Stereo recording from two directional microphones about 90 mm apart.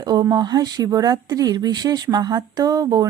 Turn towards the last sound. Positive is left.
turn(degrees=-45)  # may be behind; listen again after turning